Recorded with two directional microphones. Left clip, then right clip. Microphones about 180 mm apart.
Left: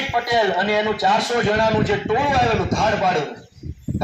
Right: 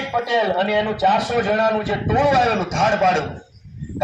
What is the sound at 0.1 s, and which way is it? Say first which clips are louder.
A man's voice: even; 25° right (ahead or behind).